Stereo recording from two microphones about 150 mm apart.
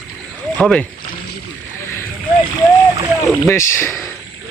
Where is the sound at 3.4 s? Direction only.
15° left (ahead or behind).